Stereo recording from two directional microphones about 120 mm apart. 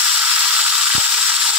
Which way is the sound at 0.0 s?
10° right (ahead or behind).